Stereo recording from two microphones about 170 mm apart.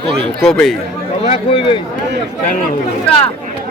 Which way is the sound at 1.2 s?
35° left (ahead or behind).